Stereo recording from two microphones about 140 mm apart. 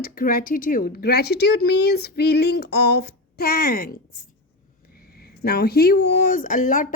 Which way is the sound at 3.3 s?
90° left.